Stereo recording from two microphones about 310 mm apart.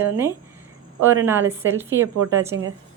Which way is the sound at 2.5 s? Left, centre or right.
Right.